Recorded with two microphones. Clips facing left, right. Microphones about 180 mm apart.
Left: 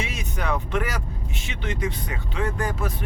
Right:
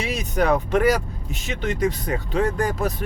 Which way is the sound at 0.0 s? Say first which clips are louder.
Right 7 dB; 35° right (ahead or behind).